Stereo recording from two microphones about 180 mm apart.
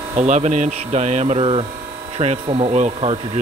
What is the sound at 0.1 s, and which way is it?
Speech, 40° right (ahead or behind).